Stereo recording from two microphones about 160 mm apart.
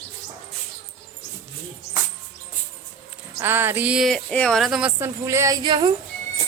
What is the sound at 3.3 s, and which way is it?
Speech, 15° right (ahead or behind).